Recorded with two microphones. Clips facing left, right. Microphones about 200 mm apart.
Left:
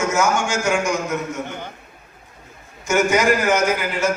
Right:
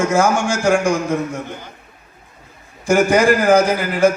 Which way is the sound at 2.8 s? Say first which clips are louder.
Right 4 dB; 35° right (ahead or behind).